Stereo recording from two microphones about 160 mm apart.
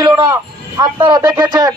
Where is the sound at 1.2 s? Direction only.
25° right (ahead or behind).